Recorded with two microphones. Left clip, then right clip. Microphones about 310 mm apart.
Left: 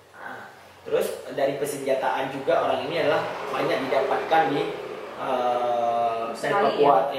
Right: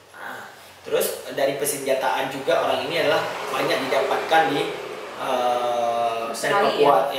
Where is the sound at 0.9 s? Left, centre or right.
Centre.